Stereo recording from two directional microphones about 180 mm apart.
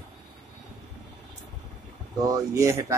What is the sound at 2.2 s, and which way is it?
Speech, 20° right (ahead or behind).